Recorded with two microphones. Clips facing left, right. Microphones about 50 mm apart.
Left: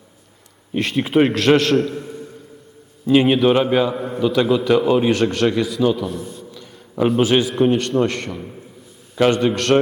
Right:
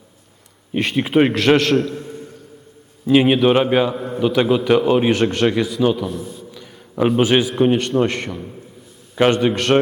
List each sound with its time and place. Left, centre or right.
0.8 s a man's voice: centre
3.1 s a man's voice: centre
3.9 s a man's voice: centre
4.2 s a man's voice: centre
4.4 s a man's voice: centre
5.1 s a man's voice: centre
6.0 s a sound: centre
7.1 s a man's voice: centre
9.1 s a man's voice: right
9.5 s a man's voice: centre